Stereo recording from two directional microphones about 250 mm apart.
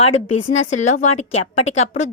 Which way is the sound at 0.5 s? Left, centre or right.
Left.